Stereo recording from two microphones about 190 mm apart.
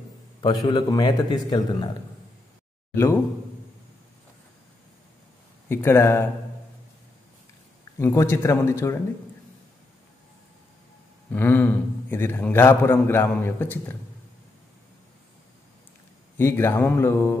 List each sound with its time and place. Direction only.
0.4 s a man's voice: 25° left (ahead or behind)
2.9 s speech: 15° left (ahead or behind)
5.7 s a man's voice: 15° left (ahead or behind)
8.0 s a man's voice: 15° left (ahead or behind)
11.3 s a man's voice: 10° left (ahead or behind)
16.3 s a man's voice: 15° left (ahead or behind)